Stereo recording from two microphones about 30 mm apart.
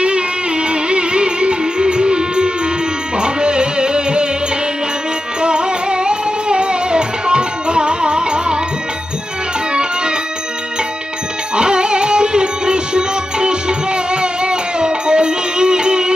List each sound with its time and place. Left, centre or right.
0.0 s music: right
5.4 s music: right
11.5 s music: right